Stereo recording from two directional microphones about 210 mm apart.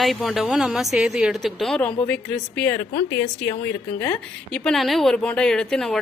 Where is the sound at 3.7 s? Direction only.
50° left (ahead or behind).